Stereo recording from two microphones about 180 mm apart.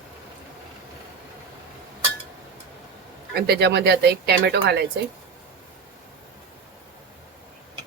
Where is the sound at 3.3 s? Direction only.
60° right (ahead or behind).